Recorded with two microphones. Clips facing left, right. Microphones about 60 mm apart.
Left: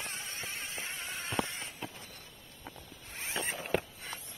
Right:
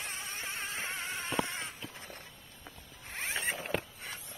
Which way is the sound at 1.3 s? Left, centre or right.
Centre.